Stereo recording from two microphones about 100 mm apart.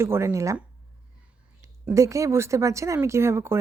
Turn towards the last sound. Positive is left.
turn(degrees=-25)  # may be behind; listen again after turning